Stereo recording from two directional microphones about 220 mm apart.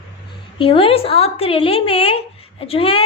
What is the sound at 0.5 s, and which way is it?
A woman's voice, 25° left (ahead or behind).